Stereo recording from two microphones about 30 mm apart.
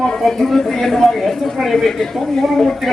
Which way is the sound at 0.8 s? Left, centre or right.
Centre.